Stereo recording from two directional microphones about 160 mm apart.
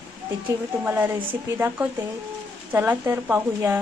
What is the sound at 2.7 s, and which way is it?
A woman's voice, 15° right (ahead or behind).